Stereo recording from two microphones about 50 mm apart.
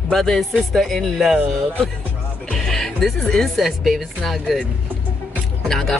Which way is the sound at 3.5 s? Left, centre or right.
Centre.